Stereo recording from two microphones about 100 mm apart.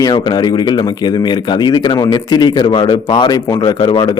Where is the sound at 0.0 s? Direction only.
45° left (ahead or behind).